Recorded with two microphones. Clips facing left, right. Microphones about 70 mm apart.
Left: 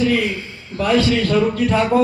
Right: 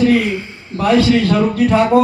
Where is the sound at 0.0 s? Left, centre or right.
Right.